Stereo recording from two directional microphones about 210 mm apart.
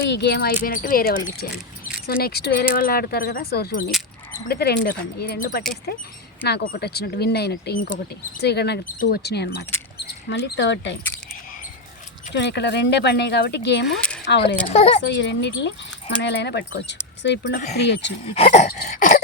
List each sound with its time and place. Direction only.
0.0 s speech: 55° left (ahead or behind)
12.3 s speech: 55° left (ahead or behind)
13.8 s speech: 5° left (ahead or behind)
14.7 s speech: 30° left (ahead or behind)
15.0 s speech: 55° left (ahead or behind)
18.3 s dog: 30° left (ahead or behind)
18.8 s cough: 40° left (ahead or behind)